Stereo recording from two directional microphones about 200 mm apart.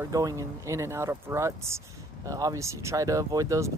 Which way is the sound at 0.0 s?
15° right (ahead or behind).